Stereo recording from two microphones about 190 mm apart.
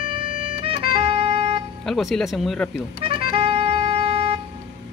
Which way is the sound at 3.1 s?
25° right (ahead or behind).